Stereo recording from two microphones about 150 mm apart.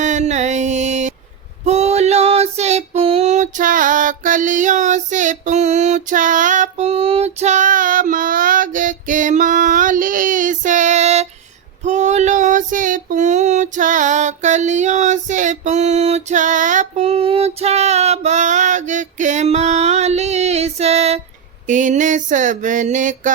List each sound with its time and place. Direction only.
0.0 s music: 50° right (ahead or behind)
1.6 s female singing: 50° right (ahead or behind)
11.8 s child singing: 50° right (ahead or behind)
21.7 s a sound: 55° right (ahead or behind)